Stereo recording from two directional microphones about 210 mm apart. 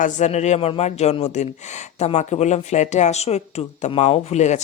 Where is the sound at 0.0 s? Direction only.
35° left (ahead or behind).